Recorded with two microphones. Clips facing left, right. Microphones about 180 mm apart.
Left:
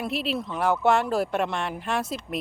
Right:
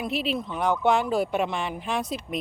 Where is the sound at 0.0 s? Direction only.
Centre (ahead or behind).